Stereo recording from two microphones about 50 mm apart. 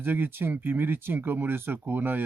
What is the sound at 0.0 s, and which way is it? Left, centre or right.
Speech, right.